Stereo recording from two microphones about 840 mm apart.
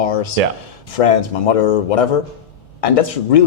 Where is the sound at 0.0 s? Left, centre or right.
Left.